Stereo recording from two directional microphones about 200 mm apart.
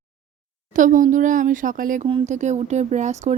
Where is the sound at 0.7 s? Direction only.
40° right (ahead or behind).